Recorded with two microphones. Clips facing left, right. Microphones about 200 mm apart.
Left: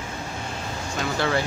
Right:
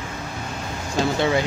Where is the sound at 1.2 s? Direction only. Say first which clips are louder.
Right 2 dB; 15° right (ahead or behind).